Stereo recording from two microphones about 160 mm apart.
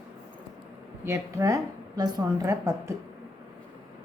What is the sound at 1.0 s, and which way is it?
A woman's voice, 15° right (ahead or behind).